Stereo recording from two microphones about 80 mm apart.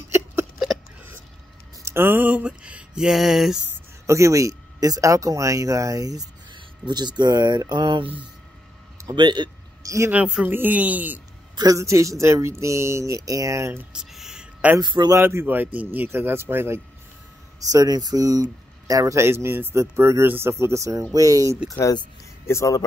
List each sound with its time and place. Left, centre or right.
1.8 s speech: right; by 3.5 s centre
4.0 s speech: right
6.5 s speech: right
9.1 s speech: right
9.8 s speech: right
10.1 s speech: centre
11.5 s speech: right
13.9 s a sound: centre
14.8 s speech: right
15.2 s speech: right
17.6 s speech: right
22.5 s speech: left